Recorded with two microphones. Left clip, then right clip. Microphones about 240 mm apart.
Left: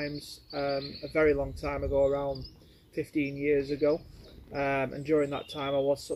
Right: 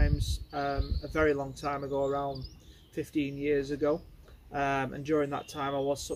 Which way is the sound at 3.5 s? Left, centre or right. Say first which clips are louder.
Left 2 dB; right.